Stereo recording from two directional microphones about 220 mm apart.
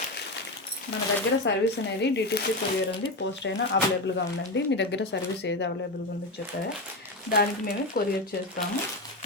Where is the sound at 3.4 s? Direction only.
55° left (ahead or behind).